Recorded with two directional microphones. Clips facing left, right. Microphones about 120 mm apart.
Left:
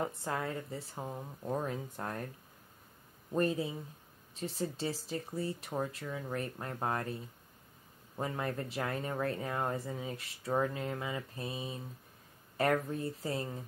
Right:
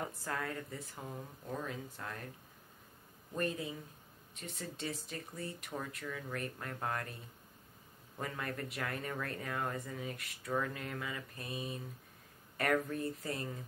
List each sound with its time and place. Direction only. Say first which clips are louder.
0.0 s speech: left 4 dB; 25° left (ahead or behind); by 2.2 s 45° left (ahead or behind)
3.3 s speech: left 6 dB; 30° left (ahead or behind)
8.2 s speech: left 4 dB; 25° left (ahead or behind)